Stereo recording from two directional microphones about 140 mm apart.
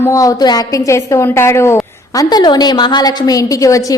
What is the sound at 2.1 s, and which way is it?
A woman's voice, 30° left (ahead or behind).